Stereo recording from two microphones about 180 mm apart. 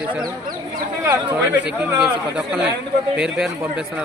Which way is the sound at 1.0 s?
20° right (ahead or behind).